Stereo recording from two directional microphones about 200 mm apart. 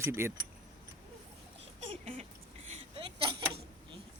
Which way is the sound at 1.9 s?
30° right (ahead or behind).